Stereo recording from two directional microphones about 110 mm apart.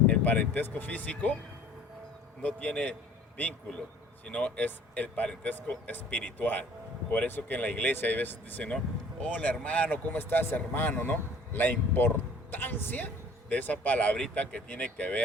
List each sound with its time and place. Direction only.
0.1 s speech: 15° left (ahead or behind)
2.4 s speech: 10° left (ahead or behind)